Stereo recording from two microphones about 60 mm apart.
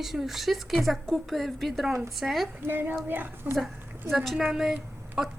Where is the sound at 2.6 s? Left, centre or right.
Right.